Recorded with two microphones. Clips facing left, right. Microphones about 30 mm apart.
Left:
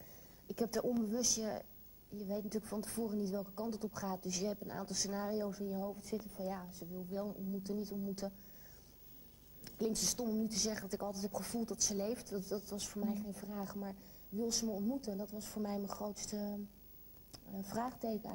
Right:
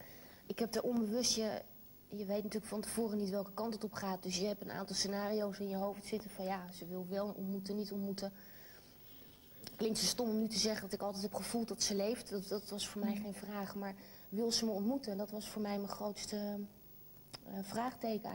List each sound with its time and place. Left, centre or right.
0.5 s a woman's voice: right
9.7 s a woman's voice: right